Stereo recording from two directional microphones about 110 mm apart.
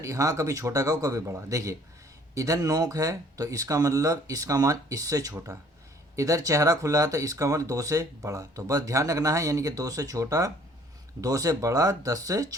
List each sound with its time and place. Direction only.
0.0 s a man's voice: 30° right (ahead or behind)